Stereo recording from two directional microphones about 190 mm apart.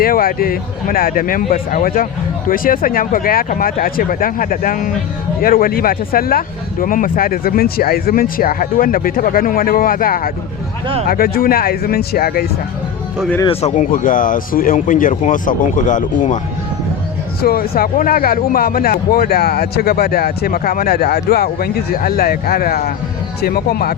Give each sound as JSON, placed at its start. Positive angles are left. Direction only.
{"t": 0.0, "sound": "speech", "side_deg": 50}
{"t": 13.4, "sound": "speech", "side_deg": 30}
{"t": 17.4, "sound": "speech", "side_deg": 50}